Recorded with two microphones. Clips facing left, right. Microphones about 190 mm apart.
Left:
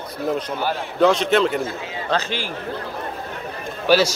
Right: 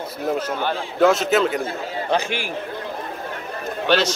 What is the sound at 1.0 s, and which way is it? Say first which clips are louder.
A man's voice: even; 5° right (ahead or behind).